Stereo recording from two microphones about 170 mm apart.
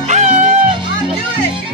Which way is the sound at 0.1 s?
45° right (ahead or behind).